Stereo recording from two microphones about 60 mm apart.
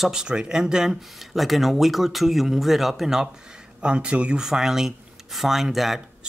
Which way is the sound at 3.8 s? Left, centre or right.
Centre.